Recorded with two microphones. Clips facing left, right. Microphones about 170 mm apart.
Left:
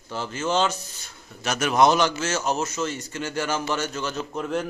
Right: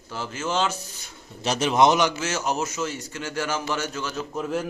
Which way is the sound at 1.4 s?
30° right (ahead or behind).